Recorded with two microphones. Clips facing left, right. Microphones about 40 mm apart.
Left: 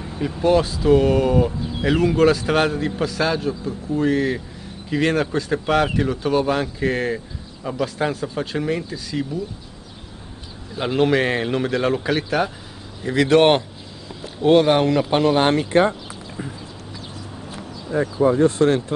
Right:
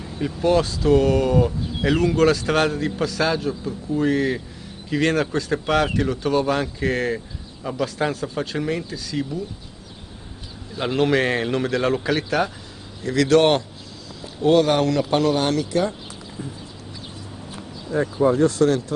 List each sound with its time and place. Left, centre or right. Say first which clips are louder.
0.4 s speech: left 2 dB; centre
10.8 s speech: left 1 dB; centre
13.0 s speech: left 2 dB; centre; by 16.5 s left
17.6 s a sound: left 1 dB; left
18.3 s speech: left 2 dB; left